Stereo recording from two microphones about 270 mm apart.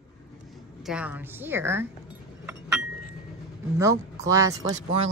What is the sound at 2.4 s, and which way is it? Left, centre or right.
Chink, centre.